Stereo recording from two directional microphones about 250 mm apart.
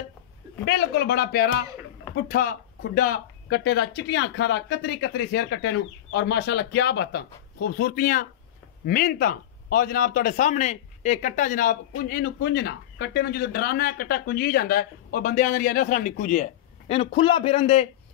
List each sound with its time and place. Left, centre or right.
0.7 s a man's voice: left